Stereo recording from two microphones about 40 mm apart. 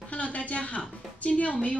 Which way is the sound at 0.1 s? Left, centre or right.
Left.